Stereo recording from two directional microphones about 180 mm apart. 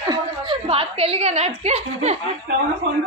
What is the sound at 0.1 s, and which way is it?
A woman's voice, 25° right (ahead or behind).